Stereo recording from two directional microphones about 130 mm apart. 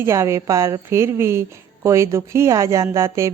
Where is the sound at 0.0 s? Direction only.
20° right (ahead or behind).